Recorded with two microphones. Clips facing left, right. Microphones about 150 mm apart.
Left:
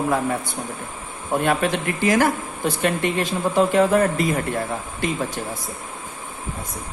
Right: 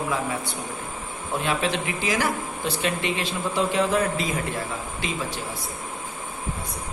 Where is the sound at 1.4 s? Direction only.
50° left (ahead or behind).